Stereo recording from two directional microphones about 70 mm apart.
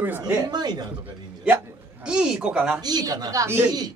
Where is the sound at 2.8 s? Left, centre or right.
Right.